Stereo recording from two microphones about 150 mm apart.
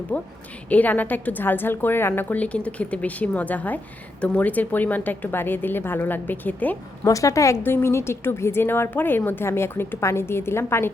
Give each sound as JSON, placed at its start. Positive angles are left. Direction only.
{"t": 0.1, "sound": "a woman's voice", "side_deg": 10}